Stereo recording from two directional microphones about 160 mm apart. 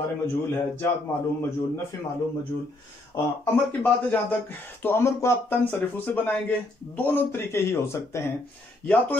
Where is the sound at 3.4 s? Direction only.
10° left (ahead or behind).